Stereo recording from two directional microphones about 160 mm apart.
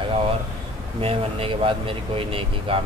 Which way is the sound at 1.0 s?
35° right (ahead or behind).